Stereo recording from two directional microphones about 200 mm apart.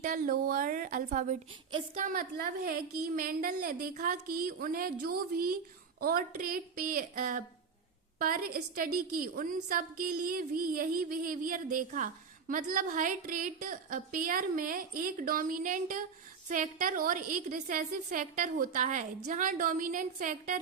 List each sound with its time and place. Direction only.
0.0 s a woman's voice: 45° right (ahead or behind)